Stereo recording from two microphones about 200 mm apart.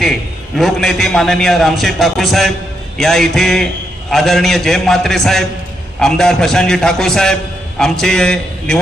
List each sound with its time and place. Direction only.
0.0 s a man's voice: centre (ahead or behind)